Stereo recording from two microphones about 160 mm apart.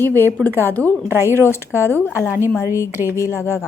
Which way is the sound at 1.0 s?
15° right (ahead or behind).